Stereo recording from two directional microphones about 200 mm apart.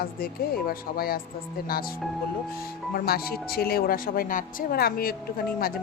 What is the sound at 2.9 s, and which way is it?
Speech, 50° left (ahead or behind).